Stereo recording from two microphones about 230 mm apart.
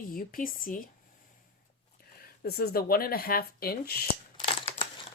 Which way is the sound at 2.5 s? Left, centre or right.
Left.